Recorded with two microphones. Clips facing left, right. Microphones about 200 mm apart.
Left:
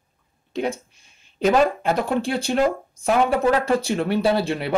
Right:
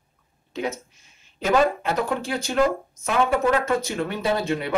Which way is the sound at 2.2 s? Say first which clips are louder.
Left 2 dB; 30° left (ahead or behind).